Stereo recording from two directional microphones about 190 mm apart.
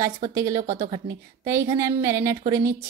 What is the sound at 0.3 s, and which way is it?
A woman's voice, 15° right (ahead or behind).